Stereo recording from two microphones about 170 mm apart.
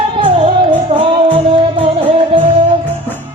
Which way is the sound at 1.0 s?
30° right (ahead or behind).